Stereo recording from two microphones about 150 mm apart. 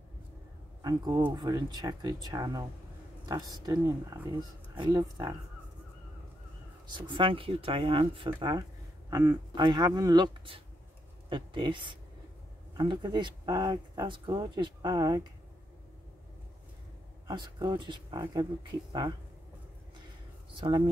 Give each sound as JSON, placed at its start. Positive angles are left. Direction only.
{"t": 0.8, "sound": "speech", "side_deg": -25}
{"t": 6.9, "sound": "speech", "side_deg": -35}
{"t": 17.3, "sound": "speech", "side_deg": -30}
{"t": 20.5, "sound": "speech", "side_deg": -30}